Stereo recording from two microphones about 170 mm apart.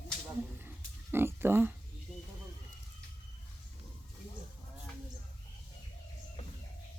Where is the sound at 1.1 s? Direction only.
15° right (ahead or behind).